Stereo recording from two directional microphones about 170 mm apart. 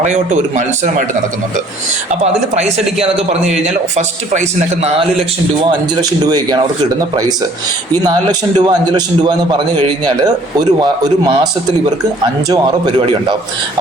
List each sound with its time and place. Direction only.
0.0 s a man's voice: 45° right (ahead or behind)
2.2 s a man's voice: 40° right (ahead or behind)
5.6 s a man's voice: 25° right (ahead or behind)
8.0 s a man's voice: 25° right (ahead or behind)
12.5 s a man's voice: 25° right (ahead or behind)